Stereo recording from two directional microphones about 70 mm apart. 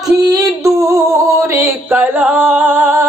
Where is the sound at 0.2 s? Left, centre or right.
Right.